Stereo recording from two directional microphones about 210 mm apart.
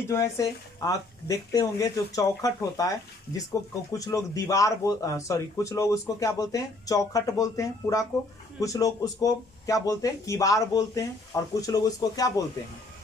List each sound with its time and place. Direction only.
0.1 s speech: 15° left (ahead or behind)
3.9 s speech: 15° left (ahead or behind)